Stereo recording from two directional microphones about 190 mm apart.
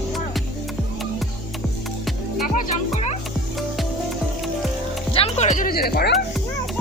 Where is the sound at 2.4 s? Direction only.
40° left (ahead or behind).